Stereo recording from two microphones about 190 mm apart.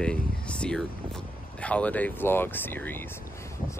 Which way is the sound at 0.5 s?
5° left (ahead or behind).